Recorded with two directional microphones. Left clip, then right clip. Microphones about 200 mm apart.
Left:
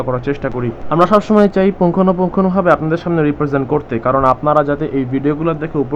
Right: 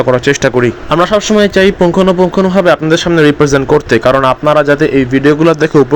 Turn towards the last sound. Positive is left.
turn(degrees=-40)  # may be behind; listen again after turning